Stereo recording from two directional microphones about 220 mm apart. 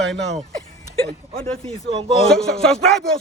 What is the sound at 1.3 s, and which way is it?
Speech, 25° right (ahead or behind).